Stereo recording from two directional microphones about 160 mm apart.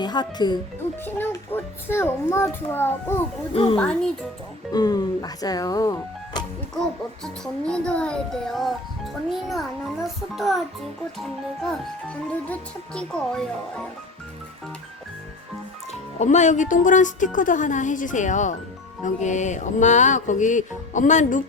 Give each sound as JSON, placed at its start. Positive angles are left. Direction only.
{"t": 0.0, "sound": "speech", "side_deg": 25}
{"t": 1.0, "sound": "a child's voice", "side_deg": 15}
{"t": 3.5, "sound": "a woman's voice", "side_deg": 35}
{"t": 3.8, "sound": "a child's voice", "side_deg": 5}
{"t": 4.7, "sound": "speech", "side_deg": 25}
{"t": 7.6, "sound": "a child's voice", "side_deg": 5}
{"t": 15.9, "sound": "speech", "side_deg": 45}
{"t": 17.3, "sound": "music", "side_deg": 55}